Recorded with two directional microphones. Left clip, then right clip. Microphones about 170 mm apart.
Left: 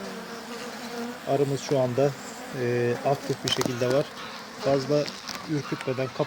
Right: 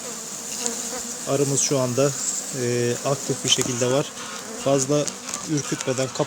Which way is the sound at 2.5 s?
15° right (ahead or behind).